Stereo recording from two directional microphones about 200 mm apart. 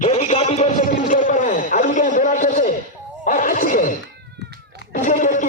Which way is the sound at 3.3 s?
40° left (ahead or behind).